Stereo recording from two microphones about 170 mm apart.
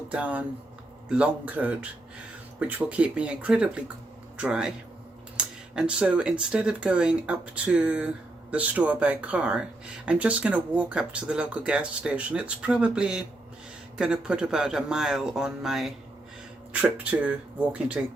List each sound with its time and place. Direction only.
0.1 s speech: 10° right (ahead or behind)